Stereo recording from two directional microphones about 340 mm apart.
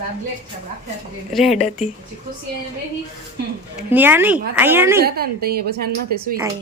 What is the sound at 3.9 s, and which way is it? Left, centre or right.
Speech, centre.